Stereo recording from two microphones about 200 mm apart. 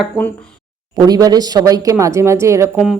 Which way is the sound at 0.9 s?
20° right (ahead or behind).